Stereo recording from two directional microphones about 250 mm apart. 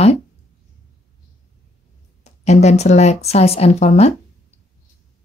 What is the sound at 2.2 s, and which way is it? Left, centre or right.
Speech, left.